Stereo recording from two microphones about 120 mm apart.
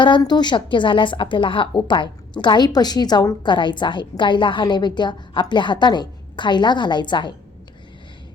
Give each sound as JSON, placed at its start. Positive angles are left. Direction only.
{"t": 0.0, "sound": "a woman's voice", "side_deg": 40}